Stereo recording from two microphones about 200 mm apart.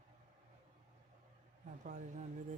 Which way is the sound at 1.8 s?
35° right (ahead or behind).